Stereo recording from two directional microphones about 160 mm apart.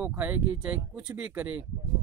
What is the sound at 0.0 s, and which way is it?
Speech, 10° right (ahead or behind).